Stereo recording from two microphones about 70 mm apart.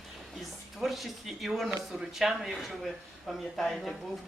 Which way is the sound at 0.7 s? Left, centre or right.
Centre.